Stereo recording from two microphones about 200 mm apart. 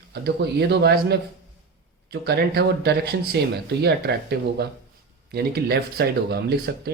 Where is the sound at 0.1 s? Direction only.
55° right (ahead or behind).